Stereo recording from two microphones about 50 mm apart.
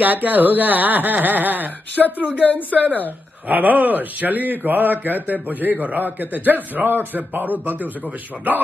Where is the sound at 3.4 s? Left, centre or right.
Right.